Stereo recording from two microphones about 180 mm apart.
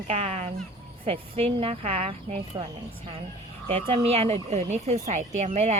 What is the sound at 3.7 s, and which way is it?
Speech, 30° right (ahead or behind).